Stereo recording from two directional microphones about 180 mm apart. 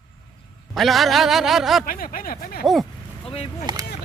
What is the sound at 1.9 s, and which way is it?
Speech, 50° left (ahead or behind).